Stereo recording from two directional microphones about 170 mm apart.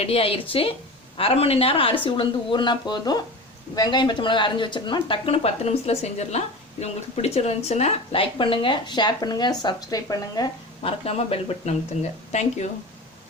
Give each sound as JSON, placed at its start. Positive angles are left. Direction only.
{"t": 0.0, "sound": "speech", "side_deg": 35}
{"t": 11.0, "sound": "speech", "side_deg": 35}